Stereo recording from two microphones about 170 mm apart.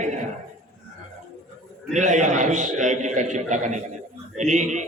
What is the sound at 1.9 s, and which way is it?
A man's voice, 45° right (ahead or behind).